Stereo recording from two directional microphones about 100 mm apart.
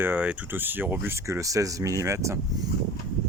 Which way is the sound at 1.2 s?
30° right (ahead or behind).